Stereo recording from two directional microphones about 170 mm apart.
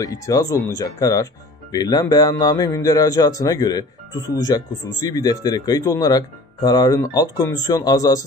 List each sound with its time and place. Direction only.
0.0 s speech: 20° left (ahead or behind)